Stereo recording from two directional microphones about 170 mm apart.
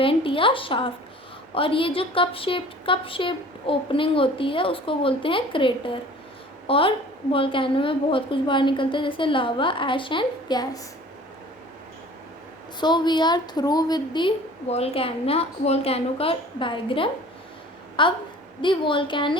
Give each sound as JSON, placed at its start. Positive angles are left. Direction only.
{"t": 0.0, "sound": "a woman's voice", "side_deg": 30}
{"t": 12.8, "sound": "a woman's voice", "side_deg": 25}